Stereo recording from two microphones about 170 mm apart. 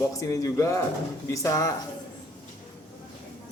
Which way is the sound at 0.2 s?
20° left (ahead or behind).